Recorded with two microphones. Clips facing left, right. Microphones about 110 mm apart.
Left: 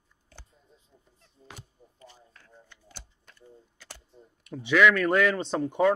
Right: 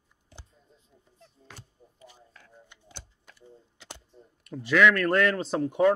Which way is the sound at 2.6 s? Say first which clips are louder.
Right 2 dB; 20° right (ahead or behind).